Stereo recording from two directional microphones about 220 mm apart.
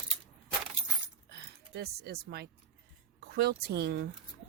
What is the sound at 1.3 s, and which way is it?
Speech, 45° right (ahead or behind).